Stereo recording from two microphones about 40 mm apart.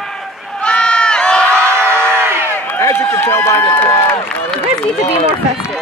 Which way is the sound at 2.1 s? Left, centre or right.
Right.